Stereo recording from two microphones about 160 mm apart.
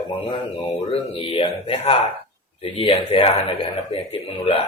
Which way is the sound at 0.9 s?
35° left (ahead or behind).